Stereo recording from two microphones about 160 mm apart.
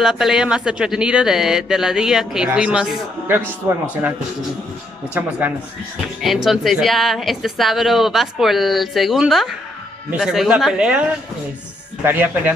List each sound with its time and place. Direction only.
0.0 s speech: 5° right (ahead or behind)
5.2 s speech: 10° right (ahead or behind)